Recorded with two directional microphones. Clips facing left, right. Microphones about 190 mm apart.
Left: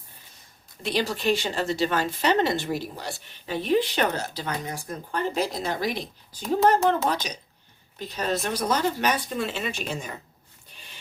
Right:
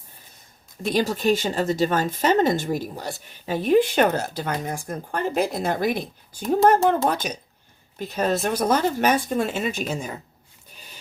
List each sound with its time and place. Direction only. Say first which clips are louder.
0.8 s speech: right 4 dB; 45° right (ahead or behind)